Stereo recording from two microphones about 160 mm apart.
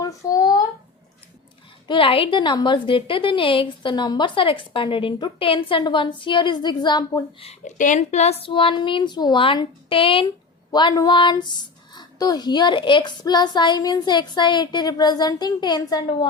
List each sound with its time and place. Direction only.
0.0 s a sound: 20° left (ahead or behind)
1.9 s a woman's voice: 35° left (ahead or behind)
7.6 s a woman's voice: 55° left (ahead or behind); by 16.3 s 25° left (ahead or behind)